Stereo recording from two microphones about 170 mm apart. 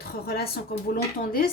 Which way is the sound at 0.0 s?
65° left (ahead or behind).